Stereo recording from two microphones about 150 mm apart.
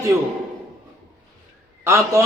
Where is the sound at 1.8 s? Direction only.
20° right (ahead or behind).